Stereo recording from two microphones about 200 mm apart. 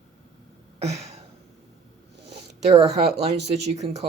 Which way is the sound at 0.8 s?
30° right (ahead or behind).